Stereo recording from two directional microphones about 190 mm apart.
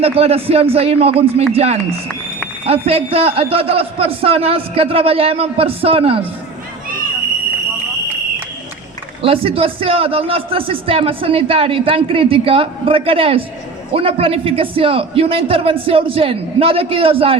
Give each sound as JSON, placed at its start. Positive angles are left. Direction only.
{"t": 0.0, "sound": "a man's voice", "side_deg": -30}
{"t": 2.8, "sound": "a man's voice", "side_deg": -30}
{"t": 9.2, "sound": "speech", "side_deg": -30}